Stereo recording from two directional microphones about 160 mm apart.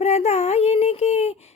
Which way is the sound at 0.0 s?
45° left (ahead or behind).